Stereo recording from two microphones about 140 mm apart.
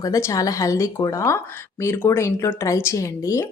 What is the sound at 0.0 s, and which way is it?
Speech, 20° left (ahead or behind).